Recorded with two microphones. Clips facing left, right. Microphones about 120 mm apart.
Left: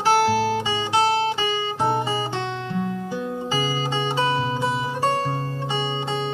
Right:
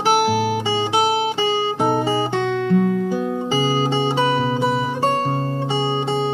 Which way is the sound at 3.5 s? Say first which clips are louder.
Right 6 dB; 30° right (ahead or behind).